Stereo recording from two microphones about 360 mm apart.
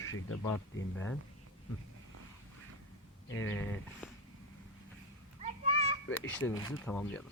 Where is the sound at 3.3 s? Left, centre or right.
Centre.